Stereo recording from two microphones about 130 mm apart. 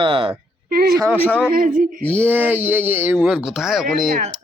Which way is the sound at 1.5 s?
90° right.